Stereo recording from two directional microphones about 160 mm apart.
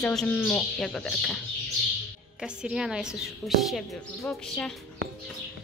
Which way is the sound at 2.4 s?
5° right (ahead or behind).